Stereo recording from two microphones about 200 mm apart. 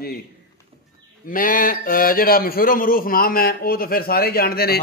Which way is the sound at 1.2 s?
45° left (ahead or behind).